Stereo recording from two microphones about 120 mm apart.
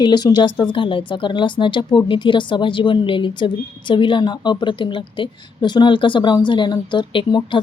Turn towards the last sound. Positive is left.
turn(degrees=40)  # may be behind; listen again after turning